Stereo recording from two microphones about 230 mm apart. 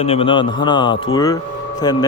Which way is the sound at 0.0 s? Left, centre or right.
Left.